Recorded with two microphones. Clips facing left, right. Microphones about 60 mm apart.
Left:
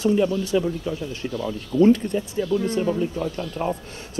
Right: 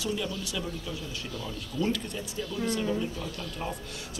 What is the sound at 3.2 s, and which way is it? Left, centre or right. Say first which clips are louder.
Speech: left 9 dB; left.